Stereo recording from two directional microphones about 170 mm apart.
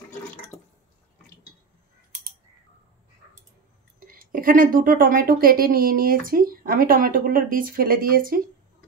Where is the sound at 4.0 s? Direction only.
55° right (ahead or behind).